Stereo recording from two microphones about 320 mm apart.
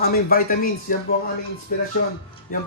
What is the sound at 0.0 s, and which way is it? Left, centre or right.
Speech, left.